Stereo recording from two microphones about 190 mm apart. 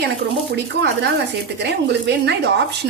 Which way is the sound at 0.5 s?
60° right (ahead or behind).